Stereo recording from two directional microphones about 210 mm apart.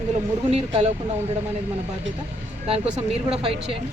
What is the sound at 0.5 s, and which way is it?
Speech, 30° right (ahead or behind).